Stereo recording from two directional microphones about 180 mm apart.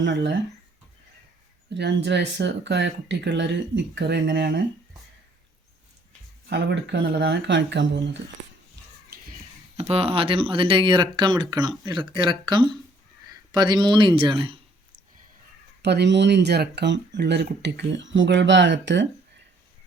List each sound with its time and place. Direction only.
0.0 s speech: 80° right
1.7 s speech: 70° right (ahead or behind)
6.5 s speech: 75° right (ahead or behind)
9.0 s a sound: 55° right (ahead or behind)
9.7 s speech: 35° right (ahead or behind)
15.8 s speech: 70° right (ahead or behind); by 19.0 s 90° right